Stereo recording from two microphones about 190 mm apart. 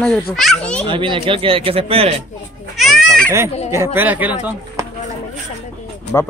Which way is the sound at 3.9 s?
10° right (ahead or behind).